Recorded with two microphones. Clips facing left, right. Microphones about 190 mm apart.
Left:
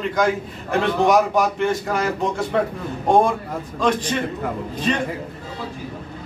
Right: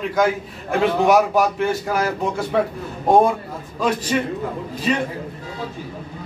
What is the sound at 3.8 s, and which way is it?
Speech, 5° right (ahead or behind).